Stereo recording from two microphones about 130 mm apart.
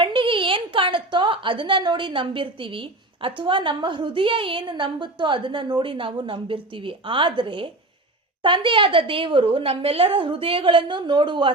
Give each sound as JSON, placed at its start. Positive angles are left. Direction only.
{"t": 0.0, "sound": "a woman's voice", "side_deg": -40}